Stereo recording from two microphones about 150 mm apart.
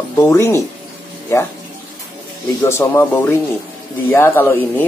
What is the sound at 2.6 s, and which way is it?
Speech, 20° left (ahead or behind).